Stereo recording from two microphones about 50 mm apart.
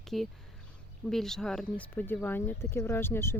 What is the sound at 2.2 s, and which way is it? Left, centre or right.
Speech, left.